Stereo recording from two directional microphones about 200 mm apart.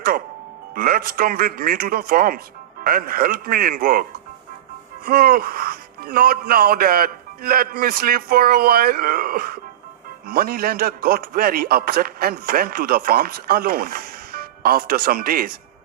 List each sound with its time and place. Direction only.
0.7 s a man's voice: 45° right (ahead or behind)
5.0 s a man's voice: 45° right (ahead or behind)